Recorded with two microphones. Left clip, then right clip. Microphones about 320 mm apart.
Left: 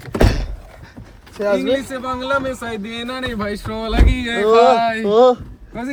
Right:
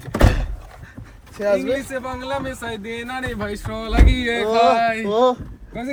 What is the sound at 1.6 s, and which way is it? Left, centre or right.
Speech, left.